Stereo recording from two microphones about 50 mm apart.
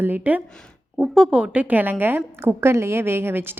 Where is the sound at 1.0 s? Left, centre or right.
Centre.